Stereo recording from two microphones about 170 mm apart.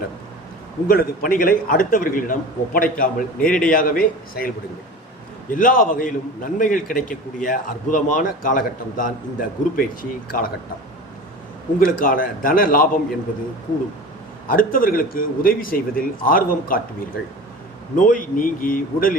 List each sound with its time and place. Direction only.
0.9 s a man's voice: 60° left (ahead or behind)
11.8 s a man's voice: 55° left (ahead or behind)
14.4 s a man's voice: 55° left (ahead or behind)
17.9 s a man's voice: 50° left (ahead or behind)